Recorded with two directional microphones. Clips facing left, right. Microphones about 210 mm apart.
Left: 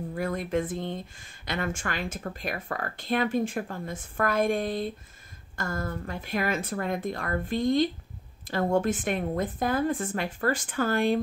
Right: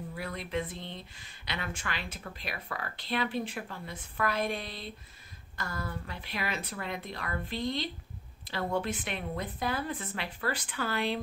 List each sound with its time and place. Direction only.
0.1 s speech: 45° left (ahead or behind)